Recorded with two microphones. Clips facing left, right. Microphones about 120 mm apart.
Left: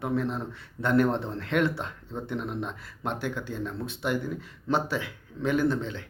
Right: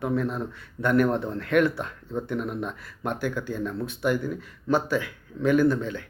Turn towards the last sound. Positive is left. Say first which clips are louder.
# right 4 dB
turn(degrees=25)  # may be behind; listen again after turning